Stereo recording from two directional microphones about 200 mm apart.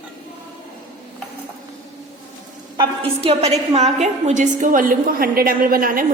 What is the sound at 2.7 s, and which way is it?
A woman's voice, 30° right (ahead or behind).